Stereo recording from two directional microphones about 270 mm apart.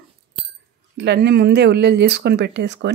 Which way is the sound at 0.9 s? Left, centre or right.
Right.